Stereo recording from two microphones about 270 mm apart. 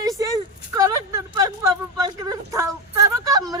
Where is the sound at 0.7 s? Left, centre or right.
Centre.